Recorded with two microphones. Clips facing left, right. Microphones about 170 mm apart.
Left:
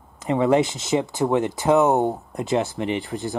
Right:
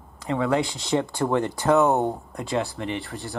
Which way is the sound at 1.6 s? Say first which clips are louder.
Left 2 dB; 20° left (ahead or behind).